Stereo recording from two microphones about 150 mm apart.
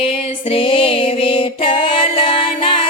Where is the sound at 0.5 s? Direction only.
35° left (ahead or behind).